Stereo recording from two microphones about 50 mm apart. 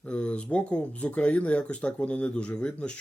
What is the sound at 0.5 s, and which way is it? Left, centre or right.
Speech, left.